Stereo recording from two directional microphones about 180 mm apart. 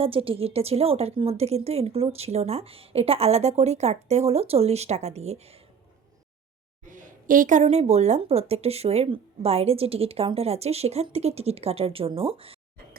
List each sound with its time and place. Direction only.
0.0 s a woman's voice: 30° right (ahead or behind)
6.8 s a woman's voice: 45° right (ahead or behind)